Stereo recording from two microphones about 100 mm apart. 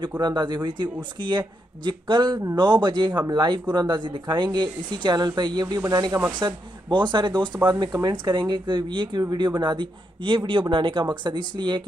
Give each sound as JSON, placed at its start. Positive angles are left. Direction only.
{"t": 0.2, "sound": "speech", "side_deg": -45}